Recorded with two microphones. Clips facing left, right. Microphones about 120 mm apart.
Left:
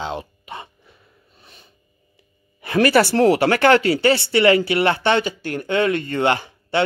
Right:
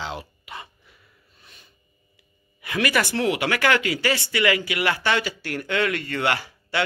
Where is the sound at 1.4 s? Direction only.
30° left (ahead or behind).